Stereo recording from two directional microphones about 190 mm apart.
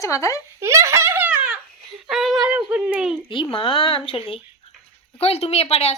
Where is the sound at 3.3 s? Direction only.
25° left (ahead or behind).